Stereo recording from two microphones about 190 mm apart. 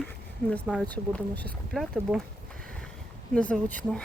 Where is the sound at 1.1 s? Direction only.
5° left (ahead or behind).